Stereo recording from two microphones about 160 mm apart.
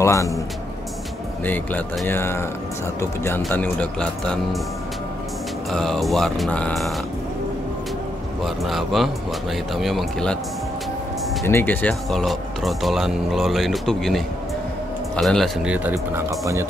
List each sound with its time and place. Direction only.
0.0 s a man's voice: 20° left (ahead or behind)
1.4 s speech: 10° left (ahead or behind)
5.7 s speech: centre (ahead or behind)
8.6 s speech: centre (ahead or behind)
11.4 s speech: 15° left (ahead or behind); by 16.6 s 20° right (ahead or behind)